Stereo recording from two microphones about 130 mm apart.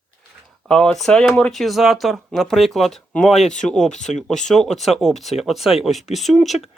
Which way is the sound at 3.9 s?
65° left (ahead or behind).